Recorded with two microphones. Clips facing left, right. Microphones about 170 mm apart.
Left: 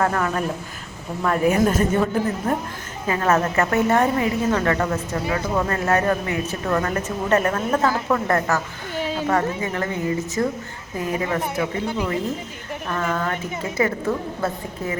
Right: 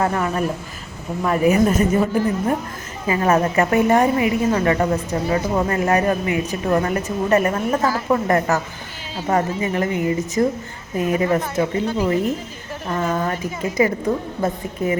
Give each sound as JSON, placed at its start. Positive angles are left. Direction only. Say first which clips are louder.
{"t": 0.0, "sound": "a woman's voice", "louder": "right 1 dB", "side_deg": -10}
{"t": 3.1, "sound": "a woman's voice", "louder": "right 2 dB", "side_deg": -15}